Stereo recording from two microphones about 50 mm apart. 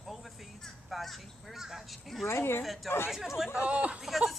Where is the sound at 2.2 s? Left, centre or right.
Left.